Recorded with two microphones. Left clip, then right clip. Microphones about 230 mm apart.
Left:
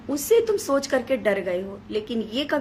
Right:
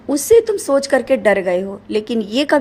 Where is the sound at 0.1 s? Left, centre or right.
Right.